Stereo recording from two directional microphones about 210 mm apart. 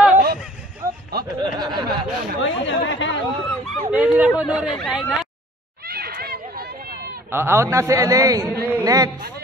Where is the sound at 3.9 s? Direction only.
5° right (ahead or behind).